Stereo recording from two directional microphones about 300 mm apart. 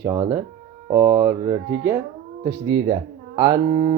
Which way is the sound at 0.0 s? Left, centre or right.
Centre.